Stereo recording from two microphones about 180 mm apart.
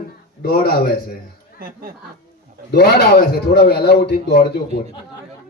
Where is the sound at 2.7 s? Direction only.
65° left (ahead or behind).